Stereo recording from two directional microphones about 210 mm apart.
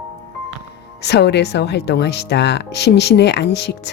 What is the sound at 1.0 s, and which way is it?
Speech, 50° left (ahead or behind).